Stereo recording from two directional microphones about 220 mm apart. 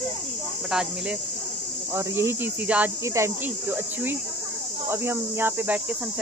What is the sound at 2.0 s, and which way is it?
Speech, 10° right (ahead or behind).